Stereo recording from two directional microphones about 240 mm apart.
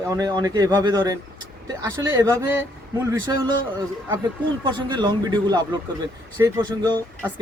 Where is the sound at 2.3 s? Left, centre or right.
Centre.